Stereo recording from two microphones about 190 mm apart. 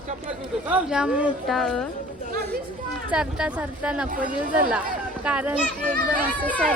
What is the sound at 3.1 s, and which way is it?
Speech, 5° right (ahead or behind).